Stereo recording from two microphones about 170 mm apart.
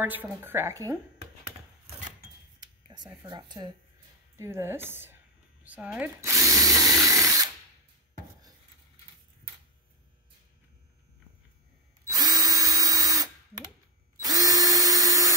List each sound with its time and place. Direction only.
0.0 s a woman's voice: 10° right (ahead or behind)
2.6 s a sound: 25° right (ahead or behind)
3.2 s speech: 25° right (ahead or behind)
4.4 s speech: 15° right (ahead or behind)
7.1 s drill: 20° right (ahead or behind)
12.1 s drill: 20° right (ahead or behind)